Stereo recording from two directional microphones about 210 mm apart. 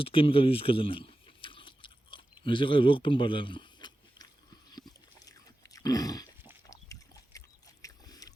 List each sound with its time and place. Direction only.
0.0 s a sound: 25° left (ahead or behind)
5.7 s dog: 15° left (ahead or behind)
7.3 s boat: 15° left (ahead or behind)